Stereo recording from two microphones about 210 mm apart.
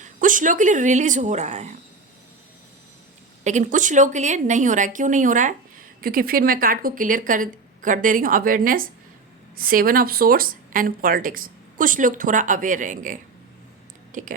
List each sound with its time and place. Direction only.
0.0 s speech: 40° right (ahead or behind)
3.4 s speech: 35° right (ahead or behind)